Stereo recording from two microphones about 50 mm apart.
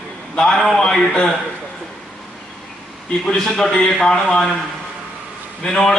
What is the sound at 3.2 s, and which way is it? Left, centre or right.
A man's voice, centre.